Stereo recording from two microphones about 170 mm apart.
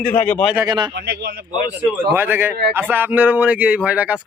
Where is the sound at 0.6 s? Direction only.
25° right (ahead or behind).